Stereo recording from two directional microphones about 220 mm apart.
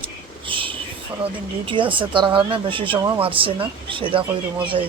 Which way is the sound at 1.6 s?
20° right (ahead or behind).